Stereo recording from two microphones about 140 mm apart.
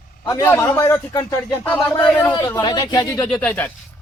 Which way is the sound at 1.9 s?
10° left (ahead or behind).